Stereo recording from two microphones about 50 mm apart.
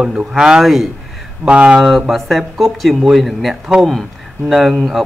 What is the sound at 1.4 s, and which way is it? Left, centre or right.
Speech, right.